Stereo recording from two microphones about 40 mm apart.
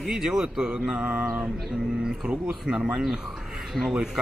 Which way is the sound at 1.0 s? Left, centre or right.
Right.